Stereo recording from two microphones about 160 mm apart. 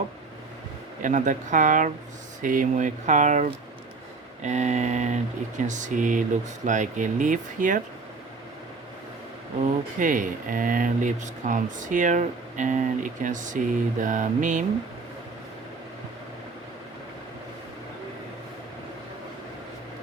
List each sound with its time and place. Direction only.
1.0 s speech: 50° right (ahead or behind)
10.0 s speech: 55° right (ahead or behind)